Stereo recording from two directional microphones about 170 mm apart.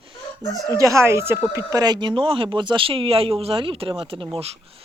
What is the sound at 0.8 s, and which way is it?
Speech, 20° right (ahead or behind).